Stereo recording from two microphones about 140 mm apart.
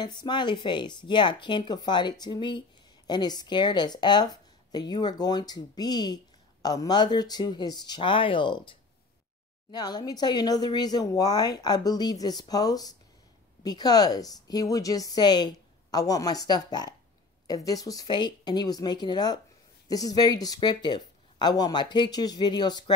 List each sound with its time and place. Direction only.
0.0 s speech: 30° left (ahead or behind)